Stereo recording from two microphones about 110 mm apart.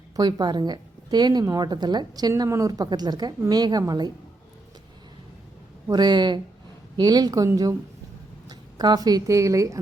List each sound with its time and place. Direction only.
0.2 s a woman's voice: 40° right (ahead or behind)
5.9 s a woman's voice: 40° right (ahead or behind)